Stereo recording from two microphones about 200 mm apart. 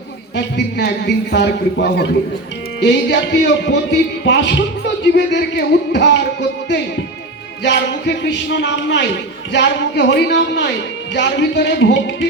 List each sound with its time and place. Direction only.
0.3 s speech: 60° left (ahead or behind)
7.6 s speech: 60° left (ahead or behind)